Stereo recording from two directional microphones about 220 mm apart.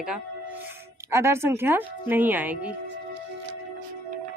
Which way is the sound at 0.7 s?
10° right (ahead or behind).